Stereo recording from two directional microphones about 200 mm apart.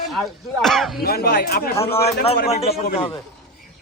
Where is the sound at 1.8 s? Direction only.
30° left (ahead or behind).